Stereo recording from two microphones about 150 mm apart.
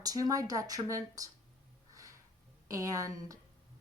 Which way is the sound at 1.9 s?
20° right (ahead or behind).